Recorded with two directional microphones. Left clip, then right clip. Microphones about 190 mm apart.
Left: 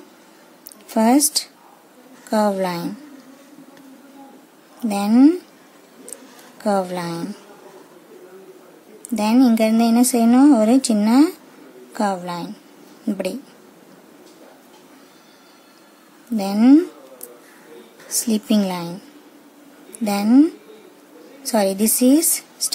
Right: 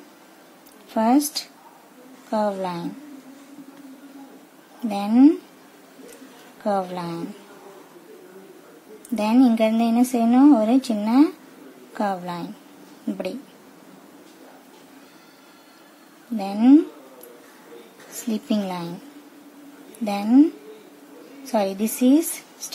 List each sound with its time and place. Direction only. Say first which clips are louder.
0.9 s speech: left 3 dB; 30° left (ahead or behind)
2.3 s a woman's voice: left 4 dB; 30° left (ahead or behind)
4.8 s speech: left 2 dB; 20° left (ahead or behind)
6.6 s speech: left 3 dB; 25° left (ahead or behind)
9.1 s speech: left 2 dB; 15° left (ahead or behind)
16.3 s speech: left 2 dB; 25° left (ahead or behind)
18.2 s speech: left 5 dB; 25° left (ahead or behind)
20.1 s speech: left 2 dB; 25° left (ahead or behind)
21.5 s speech: left 4 dB; 25° left (ahead or behind)